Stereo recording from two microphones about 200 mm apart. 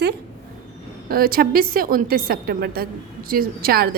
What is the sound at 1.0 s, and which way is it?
A woman's voice, 50° right (ahead or behind).